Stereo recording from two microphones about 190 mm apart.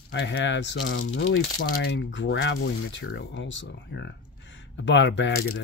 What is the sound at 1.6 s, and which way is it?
Speech, 55° left (ahead or behind).